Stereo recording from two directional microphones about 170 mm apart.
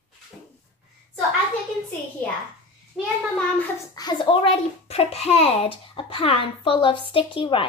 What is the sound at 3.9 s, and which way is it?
A child's voice, 25° left (ahead or behind).